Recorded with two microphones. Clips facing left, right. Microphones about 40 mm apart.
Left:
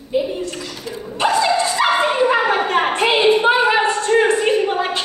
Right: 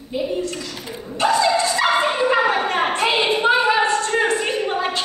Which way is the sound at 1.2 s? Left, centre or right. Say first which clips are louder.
Left 1 dB; left.